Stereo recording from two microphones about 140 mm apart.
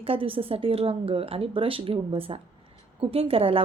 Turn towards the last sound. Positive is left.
turn(degrees=-40)  # may be behind; listen again after turning